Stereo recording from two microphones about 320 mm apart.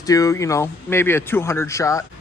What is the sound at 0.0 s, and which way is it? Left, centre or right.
Speech, centre.